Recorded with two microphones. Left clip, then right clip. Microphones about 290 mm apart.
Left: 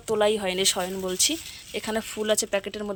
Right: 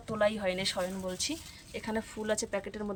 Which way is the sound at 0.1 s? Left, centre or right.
Centre.